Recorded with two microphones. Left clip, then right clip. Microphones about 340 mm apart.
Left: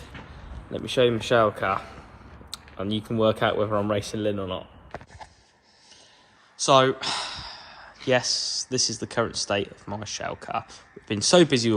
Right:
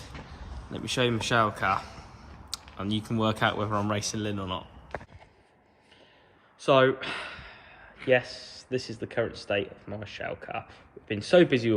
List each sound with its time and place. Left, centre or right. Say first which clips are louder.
0.7 s speech: left 6 dB; centre
6.6 s a sound: left 3 dB; centre
9.3 s speech: left 3 dB; centre